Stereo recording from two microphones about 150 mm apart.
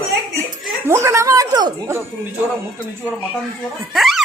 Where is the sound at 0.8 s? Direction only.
15° right (ahead or behind).